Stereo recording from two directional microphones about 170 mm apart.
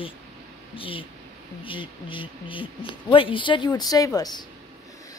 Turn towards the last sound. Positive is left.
turn(degrees=25)  # may be behind; listen again after turning